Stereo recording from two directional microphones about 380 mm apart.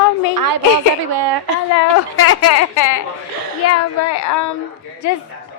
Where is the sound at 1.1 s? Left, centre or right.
Right.